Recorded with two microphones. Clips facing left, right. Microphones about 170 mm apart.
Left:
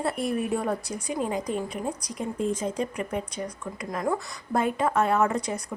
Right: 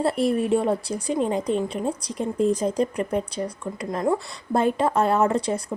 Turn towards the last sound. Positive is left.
turn(degrees=-30)  # may be behind; listen again after turning